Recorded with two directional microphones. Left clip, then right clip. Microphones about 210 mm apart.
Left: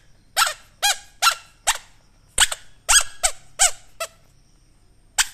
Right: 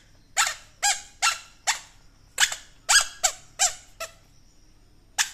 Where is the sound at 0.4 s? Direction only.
25° left (ahead or behind).